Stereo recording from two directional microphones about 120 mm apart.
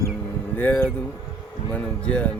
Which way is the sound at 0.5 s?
15° left (ahead or behind).